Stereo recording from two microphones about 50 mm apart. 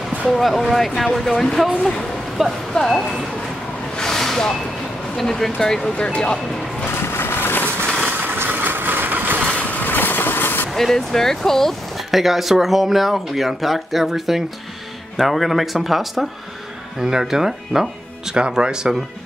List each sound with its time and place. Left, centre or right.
0.3 s speech: centre
2.4 s speech: centre
2.7 s speech: centre
4.0 s vehicle: centre
5.1 s speech: centre
7.2 s vehicle: left
8.5 s vehicle: right
9.5 s vehicle: left
10.7 s speech: centre
12.2 s speech: centre